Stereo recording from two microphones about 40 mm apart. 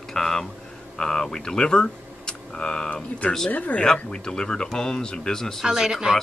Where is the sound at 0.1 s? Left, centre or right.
Centre.